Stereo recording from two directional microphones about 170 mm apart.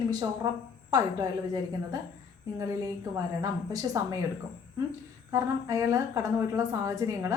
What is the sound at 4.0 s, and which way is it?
Speech, 20° right (ahead or behind).